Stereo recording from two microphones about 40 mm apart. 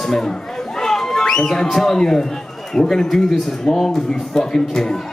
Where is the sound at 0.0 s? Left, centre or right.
Centre.